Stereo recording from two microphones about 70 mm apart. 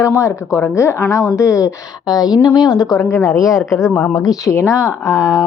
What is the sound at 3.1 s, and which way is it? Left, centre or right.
A woman's voice, left.